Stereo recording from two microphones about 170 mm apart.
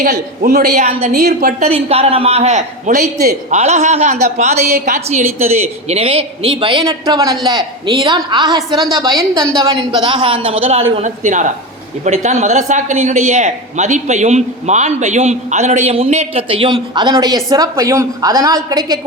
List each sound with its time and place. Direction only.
0.0 s speech: 55° right (ahead or behind)
0.9 s speech: 35° right (ahead or behind)
1.1 s a woman's voice: 55° right (ahead or behind)
1.6 s speech: 35° right (ahead or behind); by 3.3 s 55° right (ahead or behind)
3.5 s speech: 40° right (ahead or behind)
4.6 s a woman's voice: 60° right (ahead or behind)
4.9 s a woman's voice: 40° right (ahead or behind); by 18.9 s 20° right (ahead or behind)